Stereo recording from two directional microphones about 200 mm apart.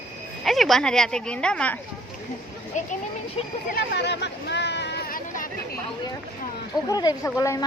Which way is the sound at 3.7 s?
60° left (ahead or behind).